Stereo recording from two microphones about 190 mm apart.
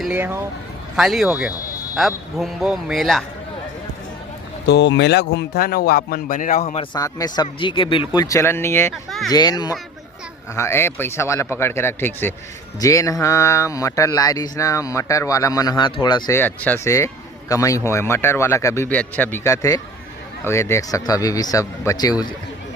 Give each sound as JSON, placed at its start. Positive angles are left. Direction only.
{"t": 0.0, "sound": "a man's voice", "side_deg": -10}
{"t": 4.6, "sound": "a man's voice", "side_deg": 65}
{"t": 6.9, "sound": "speech", "side_deg": 20}
{"t": 8.9, "sound": "a man's voice", "side_deg": 0}
{"t": 9.3, "sound": "speech", "side_deg": 20}
{"t": 16.4, "sound": "speech", "side_deg": 10}